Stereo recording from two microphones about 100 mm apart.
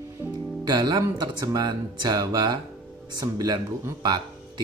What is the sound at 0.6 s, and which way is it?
Speech, 45° right (ahead or behind).